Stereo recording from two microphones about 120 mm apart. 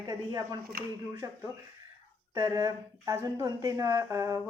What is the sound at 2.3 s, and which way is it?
A woman's voice, 25° right (ahead or behind).